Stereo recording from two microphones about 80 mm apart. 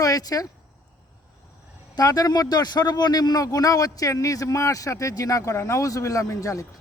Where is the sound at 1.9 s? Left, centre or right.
Left.